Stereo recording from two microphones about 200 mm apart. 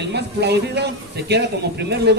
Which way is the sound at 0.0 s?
55° right (ahead or behind).